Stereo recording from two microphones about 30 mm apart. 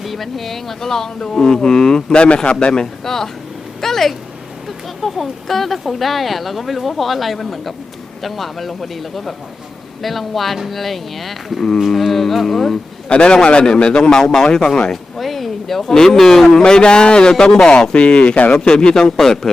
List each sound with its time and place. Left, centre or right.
0.0 s speech: centre
1.2 s speech: left
2.1 s speech: left
2.7 s speech: centre
3.8 s a sound: centre
4.9 s speech: centre
13.1 s speech: left
15.2 s speech: centre
16.6 s speech: left
17.9 s speech: left
18.5 s speech: left
19.2 s speech: centre